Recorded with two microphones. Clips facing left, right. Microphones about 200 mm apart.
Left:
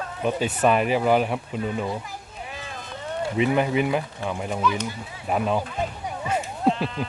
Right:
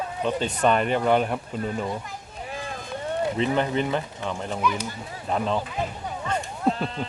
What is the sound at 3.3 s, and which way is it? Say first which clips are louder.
Speech: left 5 dB; 10° left (ahead or behind).